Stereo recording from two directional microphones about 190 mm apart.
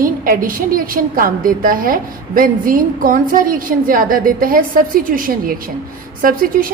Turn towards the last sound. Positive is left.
turn(degrees=-45)  # may be behind; listen again after turning